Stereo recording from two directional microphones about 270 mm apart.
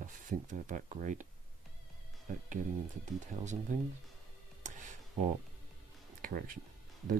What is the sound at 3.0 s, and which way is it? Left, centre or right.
Speech, right.